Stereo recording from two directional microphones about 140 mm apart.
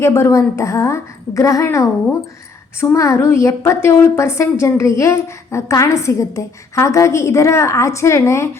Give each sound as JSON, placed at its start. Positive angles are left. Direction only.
{"t": 0.0, "sound": "a woman's voice", "side_deg": 20}
{"t": 2.9, "sound": "a woman's voice", "side_deg": 20}